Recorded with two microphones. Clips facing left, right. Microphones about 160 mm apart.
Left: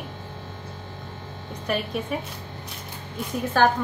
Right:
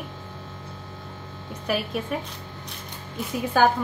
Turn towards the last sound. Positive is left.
turn(degrees=-10)  # may be behind; listen again after turning